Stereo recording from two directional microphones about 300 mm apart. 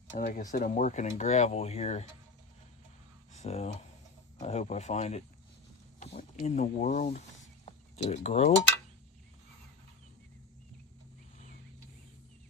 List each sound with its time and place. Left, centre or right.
0.1 s speech: left
3.3 s speech: left
7.6 s a sound: left